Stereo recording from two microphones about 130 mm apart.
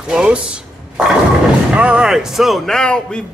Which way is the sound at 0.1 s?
5° right (ahead or behind).